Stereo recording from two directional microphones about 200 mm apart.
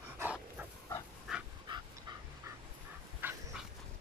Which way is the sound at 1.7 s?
25° right (ahead or behind).